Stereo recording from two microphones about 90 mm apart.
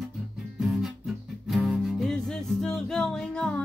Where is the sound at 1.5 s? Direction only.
5° right (ahead or behind).